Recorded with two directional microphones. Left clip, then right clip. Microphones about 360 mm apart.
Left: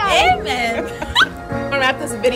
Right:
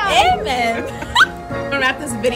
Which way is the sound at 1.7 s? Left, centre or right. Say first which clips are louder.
Left 1 dB; centre.